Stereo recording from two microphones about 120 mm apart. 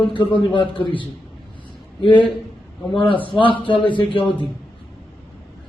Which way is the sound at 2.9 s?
45° left (ahead or behind).